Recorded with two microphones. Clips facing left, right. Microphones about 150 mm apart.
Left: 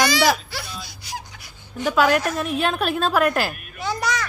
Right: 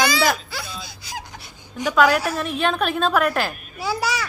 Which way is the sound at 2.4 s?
5° left (ahead or behind).